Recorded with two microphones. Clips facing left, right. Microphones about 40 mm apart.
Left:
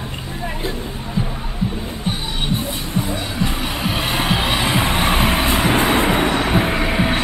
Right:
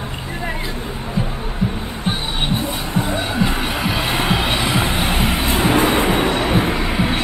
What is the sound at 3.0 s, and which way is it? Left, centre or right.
Music, right.